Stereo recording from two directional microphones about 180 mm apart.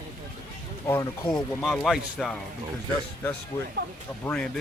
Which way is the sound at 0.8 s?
15° left (ahead or behind).